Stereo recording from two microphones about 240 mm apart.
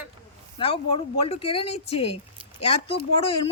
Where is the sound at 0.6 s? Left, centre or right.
Left.